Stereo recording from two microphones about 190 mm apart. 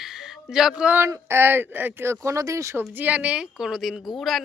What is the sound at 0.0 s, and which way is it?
A woman's voice, centre (ahead or behind).